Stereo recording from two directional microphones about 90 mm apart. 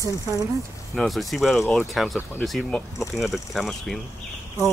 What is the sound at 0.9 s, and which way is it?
Pulleys, centre (ahead or behind).